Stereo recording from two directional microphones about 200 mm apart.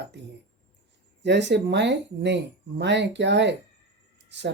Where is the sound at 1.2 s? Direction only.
60° right (ahead or behind).